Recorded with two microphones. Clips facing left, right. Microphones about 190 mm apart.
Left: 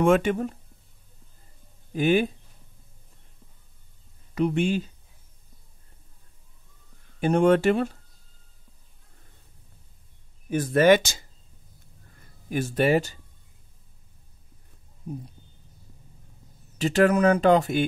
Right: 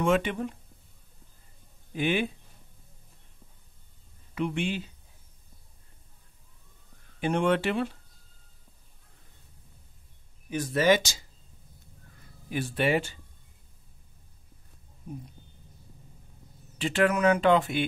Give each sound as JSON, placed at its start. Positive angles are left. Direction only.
{"t": 0.0, "sound": "speech", "side_deg": 45}
{"t": 2.0, "sound": "speech", "side_deg": 40}
{"t": 4.4, "sound": "speech", "side_deg": 40}
{"t": 7.2, "sound": "speech", "side_deg": 40}
{"t": 10.5, "sound": "speech", "side_deg": 55}
{"t": 12.4, "sound": "speech", "side_deg": 45}
{"t": 16.7, "sound": "speech", "side_deg": 40}